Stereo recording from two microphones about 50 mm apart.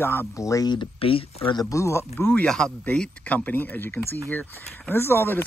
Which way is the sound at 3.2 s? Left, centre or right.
Left.